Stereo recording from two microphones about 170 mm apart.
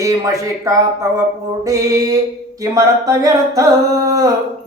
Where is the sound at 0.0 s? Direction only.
20° right (ahead or behind).